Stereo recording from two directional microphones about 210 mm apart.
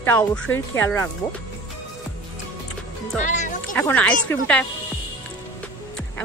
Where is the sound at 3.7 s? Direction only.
5° left (ahead or behind).